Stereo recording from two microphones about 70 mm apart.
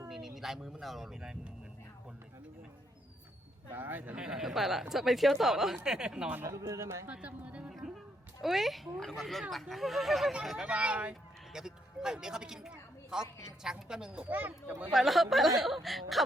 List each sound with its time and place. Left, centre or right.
0.1 s speech: centre
3.7 s speech: right
4.2 s speech: centre
6.4 s a man's voice: right
7.1 s speech: centre
7.7 s a sound: centre
8.4 s speech: centre
10.7 s speech: centre
11.1 s a sound: centre
13.6 s a woman's voice: centre
14.3 s speech: right
14.9 s speech: centre